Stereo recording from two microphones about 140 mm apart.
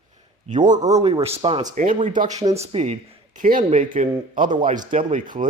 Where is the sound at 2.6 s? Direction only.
50° right (ahead or behind).